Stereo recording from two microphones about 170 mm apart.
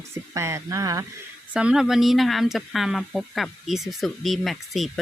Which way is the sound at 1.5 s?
5° right (ahead or behind).